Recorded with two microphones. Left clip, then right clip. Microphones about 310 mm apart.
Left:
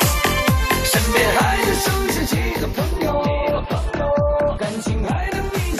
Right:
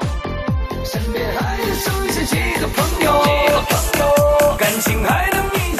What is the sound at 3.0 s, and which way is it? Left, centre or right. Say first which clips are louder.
Music: right 7 dB; right.